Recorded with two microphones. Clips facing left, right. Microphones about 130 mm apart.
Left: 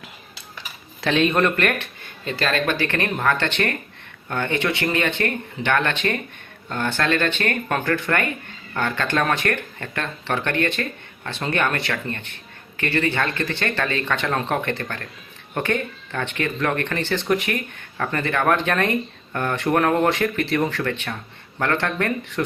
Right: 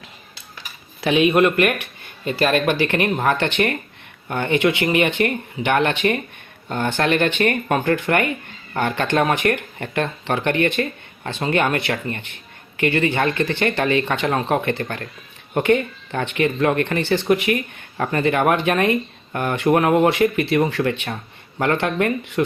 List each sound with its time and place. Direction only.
1.0 s speech: 10° right (ahead or behind)